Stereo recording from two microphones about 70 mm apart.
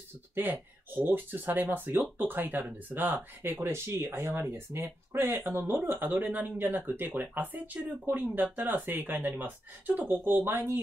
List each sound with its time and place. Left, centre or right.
0.3 s speech: right